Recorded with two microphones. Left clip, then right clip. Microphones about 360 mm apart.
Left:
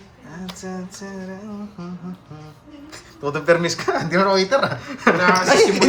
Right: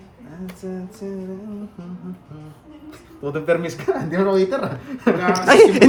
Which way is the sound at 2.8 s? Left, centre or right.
Left.